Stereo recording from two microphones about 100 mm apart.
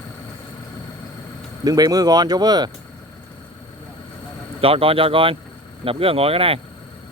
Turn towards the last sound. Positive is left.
turn(degrees=-70)  # may be behind; listen again after turning